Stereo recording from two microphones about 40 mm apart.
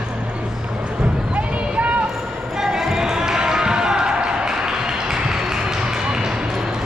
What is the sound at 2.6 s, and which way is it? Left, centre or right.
Basketball bounce, centre.